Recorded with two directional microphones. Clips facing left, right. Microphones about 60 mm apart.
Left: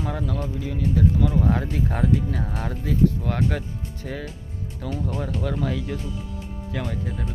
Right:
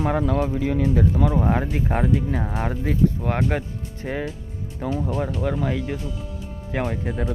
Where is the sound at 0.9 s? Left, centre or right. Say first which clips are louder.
Right 1 dB; right; by 6.0 s centre.